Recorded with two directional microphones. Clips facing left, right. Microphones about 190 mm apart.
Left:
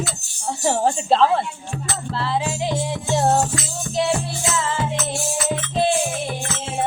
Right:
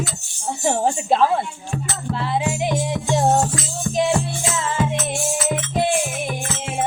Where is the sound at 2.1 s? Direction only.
15° right (ahead or behind).